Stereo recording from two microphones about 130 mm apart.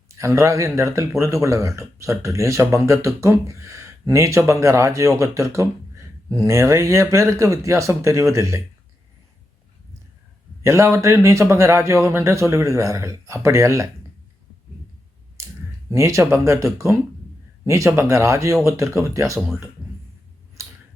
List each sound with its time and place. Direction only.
0.1 s speech: 20° right (ahead or behind)
10.6 s speech: 20° right (ahead or behind)
15.4 s clicking: 25° right (ahead or behind)
15.9 s speech: 25° right (ahead or behind)
19.8 s a sound: centre (ahead or behind)